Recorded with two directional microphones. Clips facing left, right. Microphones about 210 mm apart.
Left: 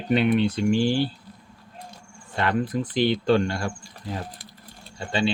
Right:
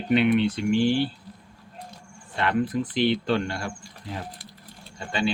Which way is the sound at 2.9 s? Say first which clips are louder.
Left 4 dB; 40° left (ahead or behind).